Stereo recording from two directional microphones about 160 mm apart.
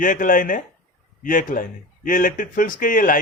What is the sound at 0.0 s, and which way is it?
A man's voice, 55° left (ahead or behind).